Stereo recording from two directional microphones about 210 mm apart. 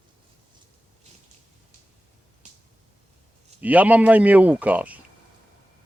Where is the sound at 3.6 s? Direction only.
5° right (ahead or behind).